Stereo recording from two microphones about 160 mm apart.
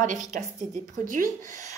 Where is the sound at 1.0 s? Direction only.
55° right (ahead or behind).